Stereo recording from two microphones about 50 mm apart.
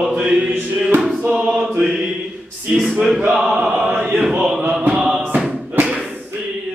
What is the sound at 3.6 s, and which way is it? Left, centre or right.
Choir, centre.